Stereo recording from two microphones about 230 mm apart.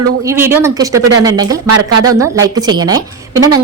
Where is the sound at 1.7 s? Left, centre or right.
Right.